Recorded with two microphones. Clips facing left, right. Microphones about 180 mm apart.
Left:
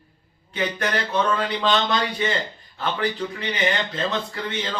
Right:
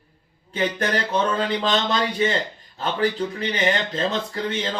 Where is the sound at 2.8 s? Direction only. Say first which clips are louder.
Right 2 dB; 40° right (ahead or behind).